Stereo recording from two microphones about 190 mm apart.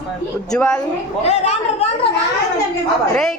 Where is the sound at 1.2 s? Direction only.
35° left (ahead or behind).